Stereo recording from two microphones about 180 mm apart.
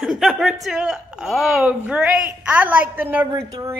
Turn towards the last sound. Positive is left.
turn(degrees=-20)  # may be behind; listen again after turning